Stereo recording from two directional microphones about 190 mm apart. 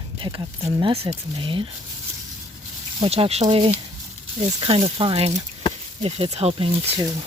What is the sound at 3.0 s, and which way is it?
Speech, 30° right (ahead or behind).